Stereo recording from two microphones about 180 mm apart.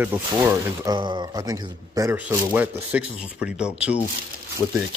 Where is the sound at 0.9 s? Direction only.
25° right (ahead or behind); by 4.0 s 5° right (ahead or behind).